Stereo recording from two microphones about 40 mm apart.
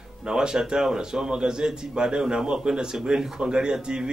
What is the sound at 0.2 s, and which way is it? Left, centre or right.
A man's voice, centre.